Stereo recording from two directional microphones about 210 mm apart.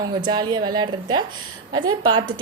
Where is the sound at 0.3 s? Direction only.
20° right (ahead or behind).